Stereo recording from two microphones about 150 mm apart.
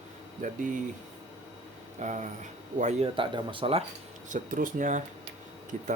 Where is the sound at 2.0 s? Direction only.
55° right (ahead or behind).